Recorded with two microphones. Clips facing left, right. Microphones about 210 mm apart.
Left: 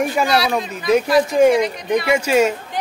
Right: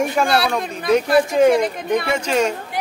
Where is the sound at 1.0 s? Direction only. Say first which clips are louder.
Even; 55° right (ahead or behind).